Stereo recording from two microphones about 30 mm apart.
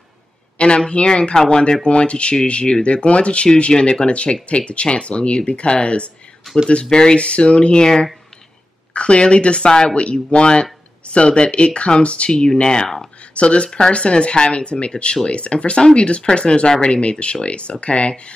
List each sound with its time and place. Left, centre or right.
0.6 s speech: left
1.9 s speech: left
7.2 s speech: left
7.8 s speech: left
8.9 s speech: left
12.3 s speech: left
13.3 s speech: left
13.7 s speech: left